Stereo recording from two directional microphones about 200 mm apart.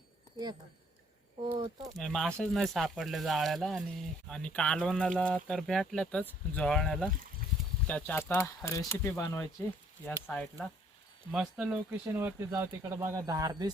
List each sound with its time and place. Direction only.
1.4 s speech: 25° right (ahead or behind)
2.0 s speech: centre (ahead or behind)
11.3 s speech: 5° right (ahead or behind)